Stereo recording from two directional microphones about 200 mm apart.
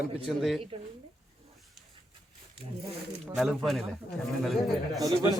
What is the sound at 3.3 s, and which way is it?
Speech, centre (ahead or behind).